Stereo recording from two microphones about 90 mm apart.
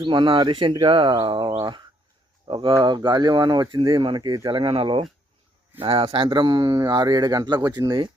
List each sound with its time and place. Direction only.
0.0 s speech: 60° right (ahead or behind)
1.2 s speech: 60° right (ahead or behind)
2.5 s speech: 75° right (ahead or behind)
2.8 s speech: 60° right (ahead or behind)
4.4 s a man's voice: 80° right
6.1 s speech: 65° right (ahead or behind)